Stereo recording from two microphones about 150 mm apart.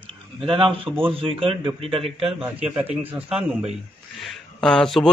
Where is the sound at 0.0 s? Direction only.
35° right (ahead or behind).